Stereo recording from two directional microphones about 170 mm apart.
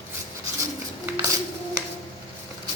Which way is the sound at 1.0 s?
20° right (ahead or behind).